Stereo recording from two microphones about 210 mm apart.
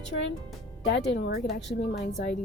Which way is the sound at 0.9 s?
55° left (ahead or behind).